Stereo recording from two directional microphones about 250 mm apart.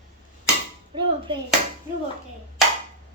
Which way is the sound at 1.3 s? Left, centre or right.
Centre.